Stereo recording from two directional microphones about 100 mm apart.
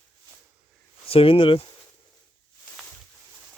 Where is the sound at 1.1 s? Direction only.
65° left (ahead or behind).